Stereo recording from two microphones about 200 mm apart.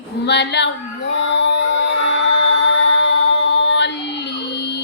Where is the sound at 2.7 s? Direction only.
65° left (ahead or behind).